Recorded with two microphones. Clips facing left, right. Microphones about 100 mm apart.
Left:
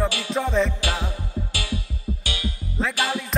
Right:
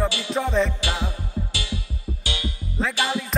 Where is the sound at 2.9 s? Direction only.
25° right (ahead or behind).